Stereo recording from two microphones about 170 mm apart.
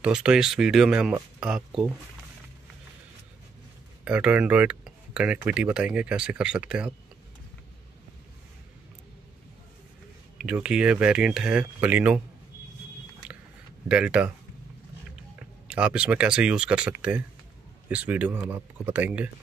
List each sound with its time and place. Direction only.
0.0 s speech: 5° right (ahead or behind)
4.0 s speech: 5° right (ahead or behind)
10.3 s speech: 5° right (ahead or behind)
13.8 s speech: 5° right (ahead or behind)
15.7 s speech: 5° right (ahead or behind)